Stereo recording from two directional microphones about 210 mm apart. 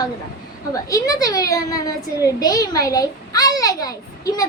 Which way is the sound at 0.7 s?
15° left (ahead or behind).